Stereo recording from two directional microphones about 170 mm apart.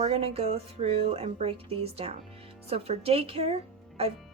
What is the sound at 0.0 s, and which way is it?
Speech, 35° right (ahead or behind).